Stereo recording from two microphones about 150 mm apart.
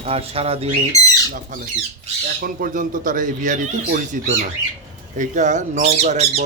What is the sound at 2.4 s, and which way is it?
Speech, 65° right (ahead or behind).